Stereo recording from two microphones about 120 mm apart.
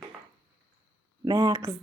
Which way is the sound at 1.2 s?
35° right (ahead or behind).